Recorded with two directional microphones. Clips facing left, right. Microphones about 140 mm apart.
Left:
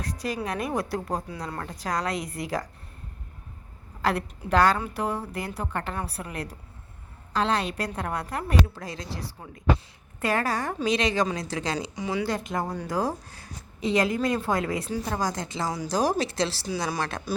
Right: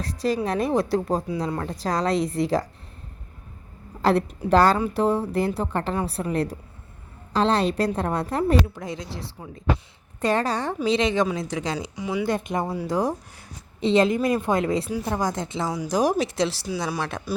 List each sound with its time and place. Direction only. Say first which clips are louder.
0.0 s speech: right 6 dB; 30° right (ahead or behind)
4.0 s a woman's voice: right 6 dB; 30° right (ahead or behind)
12.6 s speech: right 4 dB; 5° right (ahead or behind)
12.9 s a woman's voice: right 3 dB; 20° right (ahead or behind)
15.6 s speech: right 1 dB; centre (ahead or behind)
15.9 s speech: right 3 dB; 20° right (ahead or behind)
16.6 s speech: right 1 dB; 5° right (ahead or behind)